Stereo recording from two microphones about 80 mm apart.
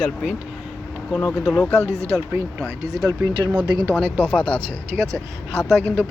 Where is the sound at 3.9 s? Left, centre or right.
Centre.